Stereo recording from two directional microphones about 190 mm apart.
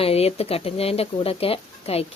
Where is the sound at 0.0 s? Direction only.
30° left (ahead or behind).